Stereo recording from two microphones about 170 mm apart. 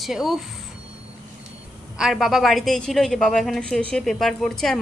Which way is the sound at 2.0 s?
5° right (ahead or behind).